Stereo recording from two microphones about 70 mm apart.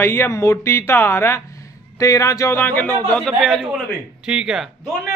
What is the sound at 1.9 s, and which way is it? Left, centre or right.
Speech, left.